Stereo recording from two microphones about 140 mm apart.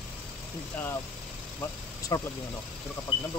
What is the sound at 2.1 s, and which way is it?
Speech, 25° left (ahead or behind).